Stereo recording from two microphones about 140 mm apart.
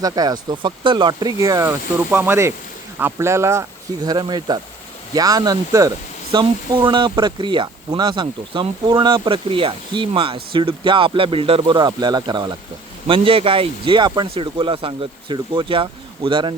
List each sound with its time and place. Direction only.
0.0 s speech: 30° right (ahead or behind)
11.6 s speech: 30° right (ahead or behind)